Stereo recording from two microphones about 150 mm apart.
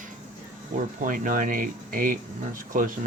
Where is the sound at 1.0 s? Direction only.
60° right (ahead or behind).